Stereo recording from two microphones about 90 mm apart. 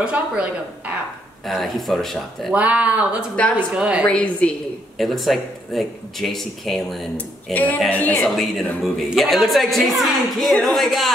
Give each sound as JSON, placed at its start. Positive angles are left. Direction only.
{"t": 0.0, "sound": "speech", "side_deg": -10}
{"t": 1.4, "sound": "a woman's voice", "side_deg": 0}
{"t": 2.5, "sound": "speech", "side_deg": -15}
{"t": 4.1, "sound": "a woman's voice", "side_deg": 15}
{"t": 4.9, "sound": "a woman's voice", "side_deg": 0}
{"t": 7.5, "sound": "a woman's voice", "side_deg": 20}
{"t": 8.8, "sound": "a woman's voice", "side_deg": 0}